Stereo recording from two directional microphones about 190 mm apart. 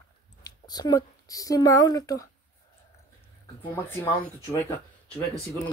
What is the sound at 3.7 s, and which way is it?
Speech, 10° left (ahead or behind).